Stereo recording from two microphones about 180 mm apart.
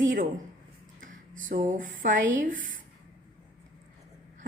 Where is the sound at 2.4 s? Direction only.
45° right (ahead or behind).